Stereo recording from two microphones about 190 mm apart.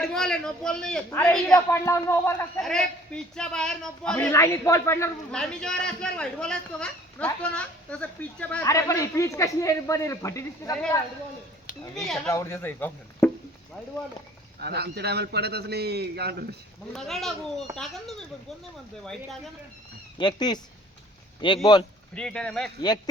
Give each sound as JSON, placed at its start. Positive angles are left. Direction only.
{"t": 0.0, "sound": "a man's voice", "side_deg": 5}
{"t": 1.7, "sound": "a man's voice", "side_deg": 15}
{"t": 2.6, "sound": "a man's voice", "side_deg": 5}
{"t": 12.0, "sound": "a man's voice", "side_deg": 0}
{"t": 12.3, "sound": "a man's voice", "side_deg": 15}
{"t": 13.2, "sound": "a sound", "side_deg": 5}
{"t": 14.6, "sound": "a man's voice", "side_deg": -60}
{"t": 16.9, "sound": "a man's voice", "side_deg": 0}
{"t": 20.1, "sound": "speech", "side_deg": 25}
{"t": 22.1, "sound": "a man's voice", "side_deg": 5}